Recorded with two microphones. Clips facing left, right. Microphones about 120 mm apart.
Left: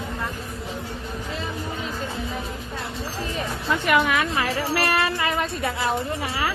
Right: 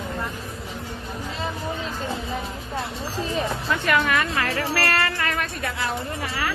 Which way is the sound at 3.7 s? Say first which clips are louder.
Left 2 dB; 15° left (ahead or behind).